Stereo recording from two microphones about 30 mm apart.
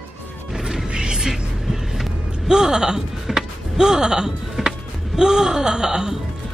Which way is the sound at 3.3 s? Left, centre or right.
Centre.